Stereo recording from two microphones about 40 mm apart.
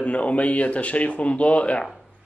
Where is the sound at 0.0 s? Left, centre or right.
Left.